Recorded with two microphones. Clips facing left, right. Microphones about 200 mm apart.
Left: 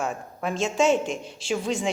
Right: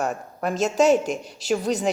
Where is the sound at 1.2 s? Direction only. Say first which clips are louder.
Left 1 dB; centre (ahead or behind).